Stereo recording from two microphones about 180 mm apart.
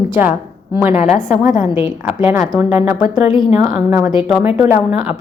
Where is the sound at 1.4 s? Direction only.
15° right (ahead or behind).